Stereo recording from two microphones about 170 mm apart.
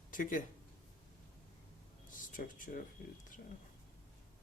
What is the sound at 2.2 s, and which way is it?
Speech, 50° left (ahead or behind).